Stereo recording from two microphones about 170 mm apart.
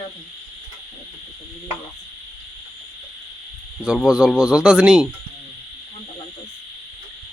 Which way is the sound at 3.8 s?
5° right (ahead or behind).